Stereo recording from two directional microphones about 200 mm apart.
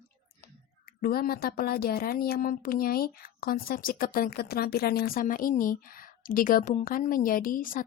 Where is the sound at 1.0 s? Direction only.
45° left (ahead or behind).